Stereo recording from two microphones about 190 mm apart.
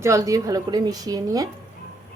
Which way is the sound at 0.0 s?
15° right (ahead or behind).